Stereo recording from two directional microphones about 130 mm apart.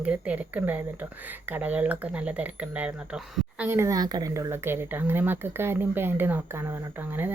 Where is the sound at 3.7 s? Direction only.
20° right (ahead or behind).